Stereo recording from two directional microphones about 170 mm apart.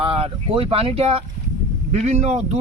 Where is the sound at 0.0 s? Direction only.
35° right (ahead or behind).